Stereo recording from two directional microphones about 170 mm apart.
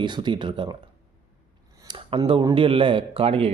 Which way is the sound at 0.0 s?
25° right (ahead or behind).